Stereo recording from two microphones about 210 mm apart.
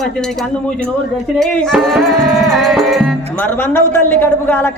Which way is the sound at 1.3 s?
5° left (ahead or behind).